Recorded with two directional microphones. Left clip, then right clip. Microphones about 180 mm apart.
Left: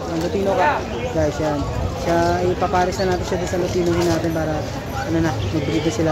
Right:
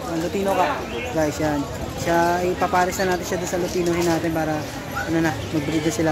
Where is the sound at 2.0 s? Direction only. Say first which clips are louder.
Left 1 dB; 15° right (ahead or behind).